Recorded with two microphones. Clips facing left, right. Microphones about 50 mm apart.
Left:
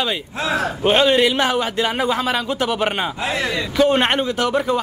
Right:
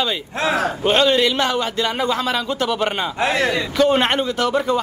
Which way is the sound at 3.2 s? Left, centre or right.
Right.